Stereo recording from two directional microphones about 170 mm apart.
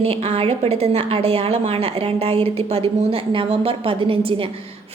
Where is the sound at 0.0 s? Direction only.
35° right (ahead or behind).